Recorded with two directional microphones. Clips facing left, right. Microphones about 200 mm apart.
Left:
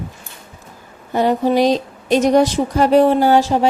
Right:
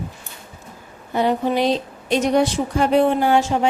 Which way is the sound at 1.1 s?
40° left (ahead or behind).